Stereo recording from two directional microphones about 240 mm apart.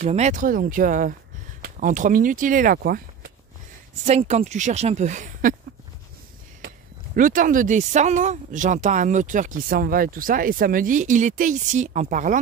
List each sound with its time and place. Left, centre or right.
0.0 s speech: right
4.0 s speech: right
7.2 s speech: right